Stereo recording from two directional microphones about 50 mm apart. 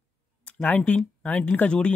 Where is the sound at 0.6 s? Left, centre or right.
Left.